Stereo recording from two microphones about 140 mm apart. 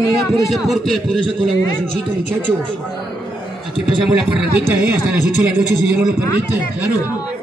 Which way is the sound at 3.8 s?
Centre (ahead or behind).